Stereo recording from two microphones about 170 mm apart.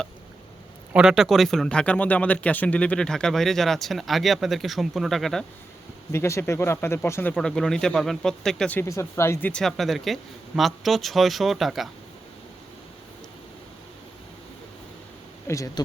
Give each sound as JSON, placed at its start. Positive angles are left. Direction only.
{"t": 0.9, "sound": "speech", "side_deg": -5}
{"t": 6.1, "sound": "speech", "side_deg": 15}
{"t": 15.4, "sound": "speech", "side_deg": 20}